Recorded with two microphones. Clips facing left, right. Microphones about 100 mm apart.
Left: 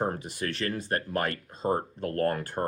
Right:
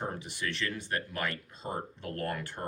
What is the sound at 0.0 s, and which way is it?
Speech, 45° left (ahead or behind).